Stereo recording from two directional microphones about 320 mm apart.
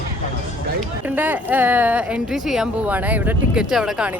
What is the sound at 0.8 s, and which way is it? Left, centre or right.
Speech, centre.